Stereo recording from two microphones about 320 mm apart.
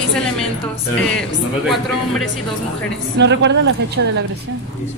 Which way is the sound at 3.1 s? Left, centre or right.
Right.